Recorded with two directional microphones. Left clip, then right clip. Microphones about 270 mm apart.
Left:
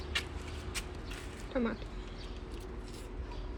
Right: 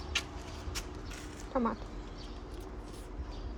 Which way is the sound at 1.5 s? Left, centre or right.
Right.